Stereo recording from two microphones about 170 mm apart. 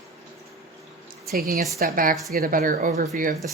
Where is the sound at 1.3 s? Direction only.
60° right (ahead or behind).